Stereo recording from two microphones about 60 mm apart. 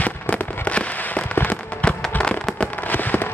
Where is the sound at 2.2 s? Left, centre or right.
Centre.